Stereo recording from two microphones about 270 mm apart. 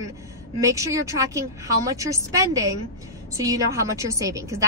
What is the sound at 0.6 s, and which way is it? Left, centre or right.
A woman's voice, centre.